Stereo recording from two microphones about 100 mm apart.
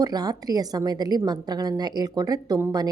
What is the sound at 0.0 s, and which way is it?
A woman's voice, 40° right (ahead or behind).